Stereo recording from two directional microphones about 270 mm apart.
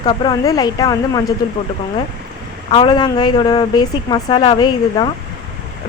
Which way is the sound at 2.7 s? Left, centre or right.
Centre.